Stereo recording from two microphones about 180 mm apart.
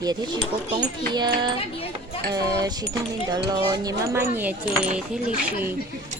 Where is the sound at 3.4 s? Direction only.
20° right (ahead or behind).